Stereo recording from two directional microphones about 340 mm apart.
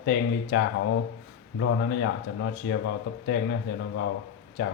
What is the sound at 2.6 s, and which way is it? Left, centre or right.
Speech, left.